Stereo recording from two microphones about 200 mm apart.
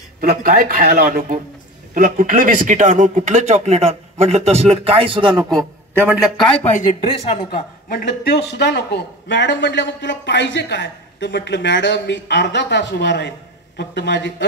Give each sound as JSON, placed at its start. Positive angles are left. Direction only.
{"t": 0.2, "sound": "a man's voice", "side_deg": -50}
{"t": 5.9, "sound": "a man's voice", "side_deg": -5}
{"t": 6.7, "sound": "speech", "side_deg": 35}
{"t": 7.9, "sound": "a man's voice", "side_deg": 50}